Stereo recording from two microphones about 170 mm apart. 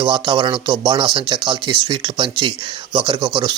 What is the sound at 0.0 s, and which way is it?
Speech, 25° right (ahead or behind).